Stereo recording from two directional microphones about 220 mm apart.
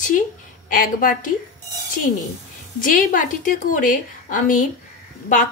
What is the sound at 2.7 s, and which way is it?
A woman's voice, 35° left (ahead or behind).